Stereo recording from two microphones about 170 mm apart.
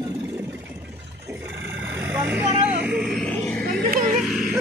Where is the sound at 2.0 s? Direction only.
10° right (ahead or behind).